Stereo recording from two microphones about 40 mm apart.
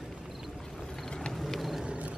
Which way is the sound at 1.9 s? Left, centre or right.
Right.